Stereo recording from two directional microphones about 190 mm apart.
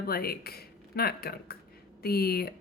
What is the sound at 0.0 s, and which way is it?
Speech, 55° left (ahead or behind).